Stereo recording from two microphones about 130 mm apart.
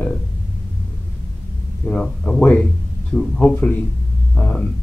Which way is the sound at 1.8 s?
5° left (ahead or behind).